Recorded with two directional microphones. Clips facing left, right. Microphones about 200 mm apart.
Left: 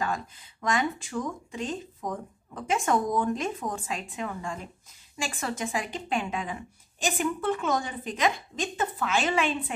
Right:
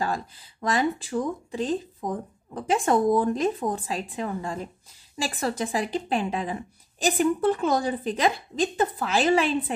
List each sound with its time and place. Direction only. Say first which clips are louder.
0.0 s speech: right 2 dB; 35° right (ahead or behind)